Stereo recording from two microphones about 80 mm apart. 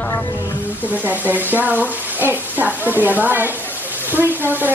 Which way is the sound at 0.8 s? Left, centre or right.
Right.